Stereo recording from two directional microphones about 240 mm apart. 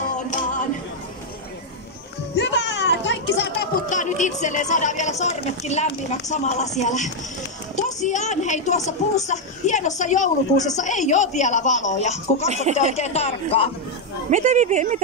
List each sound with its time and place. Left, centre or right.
0.1 s music: left
2.3 s a sound: left
4.4 s speech: left
12.4 s speech: right
12.7 s speech: left
14.3 s speech: right